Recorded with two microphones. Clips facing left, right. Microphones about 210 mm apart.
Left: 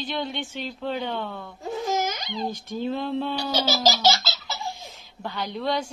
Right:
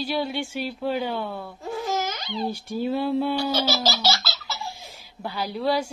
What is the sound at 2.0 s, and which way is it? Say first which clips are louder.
Babbling: left 1 dB; 15° left (ahead or behind).